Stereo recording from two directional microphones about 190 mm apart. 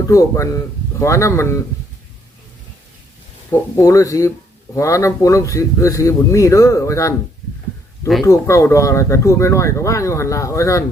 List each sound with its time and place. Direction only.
0.1 s speech: 15° left (ahead or behind)
3.5 s speech: 15° left (ahead or behind)
8.2 s speech: 15° left (ahead or behind)